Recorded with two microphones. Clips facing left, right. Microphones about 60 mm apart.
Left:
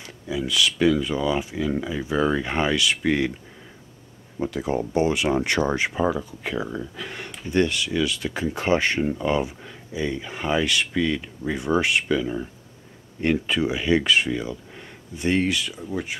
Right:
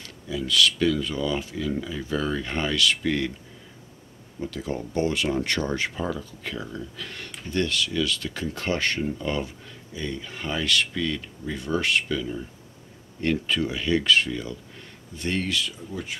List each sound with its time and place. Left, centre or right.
0.0 s speech: centre
4.5 s speech: left